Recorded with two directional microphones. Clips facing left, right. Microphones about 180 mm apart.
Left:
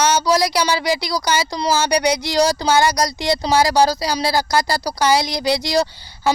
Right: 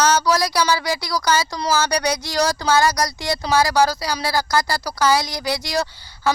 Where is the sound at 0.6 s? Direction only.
30° left (ahead or behind).